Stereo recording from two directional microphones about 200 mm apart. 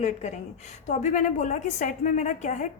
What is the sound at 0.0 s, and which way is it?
A woman's voice, 35° left (ahead or behind).